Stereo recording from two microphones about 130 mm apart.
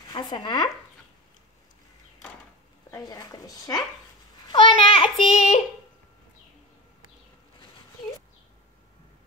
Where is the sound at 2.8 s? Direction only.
25° left (ahead or behind).